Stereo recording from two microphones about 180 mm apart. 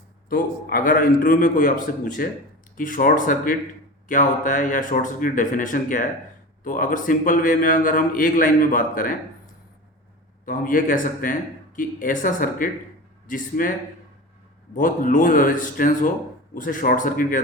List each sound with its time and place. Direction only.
0.3 s a man's voice: 50° left (ahead or behind)
10.4 s a man's voice: 50° left (ahead or behind)
14.8 s a man's voice: 45° left (ahead or behind)